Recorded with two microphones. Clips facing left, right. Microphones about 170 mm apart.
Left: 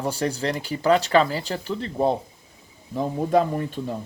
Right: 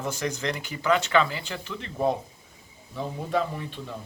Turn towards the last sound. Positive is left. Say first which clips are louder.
# left 8 dB
turn(degrees=45)  # may be behind; listen again after turning